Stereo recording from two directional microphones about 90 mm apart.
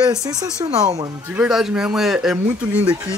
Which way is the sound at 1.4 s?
5° right (ahead or behind).